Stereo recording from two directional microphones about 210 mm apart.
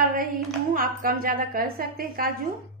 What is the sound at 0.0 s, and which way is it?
Hands, 40° right (ahead or behind).